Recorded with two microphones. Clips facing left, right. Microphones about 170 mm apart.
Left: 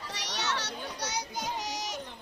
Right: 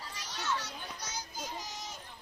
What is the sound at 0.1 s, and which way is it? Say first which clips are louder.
Children playing: left 2 dB; 80° left.